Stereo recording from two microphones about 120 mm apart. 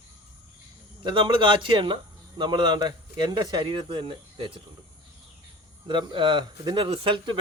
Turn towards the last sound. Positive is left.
turn(degrees=-45)  # may be behind; listen again after turning